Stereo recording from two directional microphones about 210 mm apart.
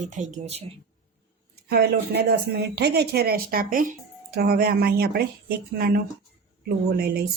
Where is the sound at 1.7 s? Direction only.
50° right (ahead or behind).